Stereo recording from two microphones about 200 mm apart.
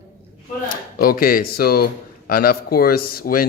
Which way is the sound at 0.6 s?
45° left (ahead or behind).